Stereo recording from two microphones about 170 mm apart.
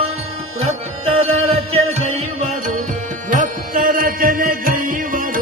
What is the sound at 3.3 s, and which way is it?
Music, 50° right (ahead or behind).